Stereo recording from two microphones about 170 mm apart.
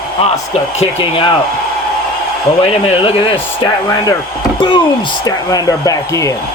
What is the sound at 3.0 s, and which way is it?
A man's voice, 30° left (ahead or behind).